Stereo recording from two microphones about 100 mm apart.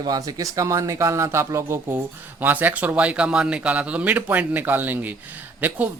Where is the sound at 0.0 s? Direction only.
40° right (ahead or behind).